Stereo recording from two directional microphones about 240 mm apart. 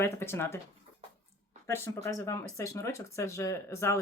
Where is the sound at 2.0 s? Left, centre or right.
Centre.